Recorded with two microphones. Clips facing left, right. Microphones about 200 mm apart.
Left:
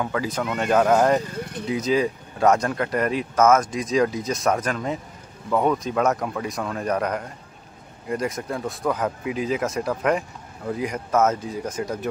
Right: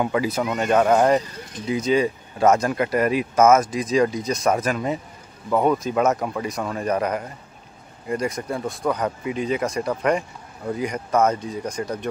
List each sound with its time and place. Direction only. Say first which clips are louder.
0.0 s speech: right 3 dB; 10° right (ahead or behind)
1.4 s vehicle: left 4 dB; 60° left (ahead or behind)
1.7 s speech: right 2 dB; centre (ahead or behind)